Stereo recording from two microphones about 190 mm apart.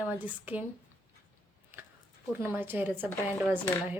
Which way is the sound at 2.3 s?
10° right (ahead or behind).